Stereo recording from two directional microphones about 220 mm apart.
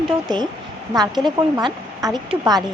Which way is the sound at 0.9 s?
20° right (ahead or behind).